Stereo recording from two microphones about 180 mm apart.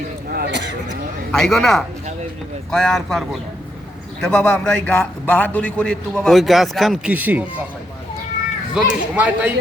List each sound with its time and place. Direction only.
1.3 s a man's voice: centre (ahead or behind)
8.7 s a man's voice: 5° right (ahead or behind)